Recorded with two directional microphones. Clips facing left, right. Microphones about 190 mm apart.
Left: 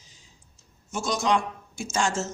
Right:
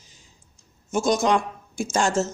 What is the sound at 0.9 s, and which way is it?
Speech, 50° right (ahead or behind).